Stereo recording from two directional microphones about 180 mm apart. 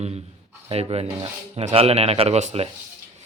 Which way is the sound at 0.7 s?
35° right (ahead or behind).